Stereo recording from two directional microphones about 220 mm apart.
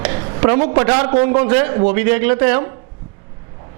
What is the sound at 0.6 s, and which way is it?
Speech, 30° right (ahead or behind).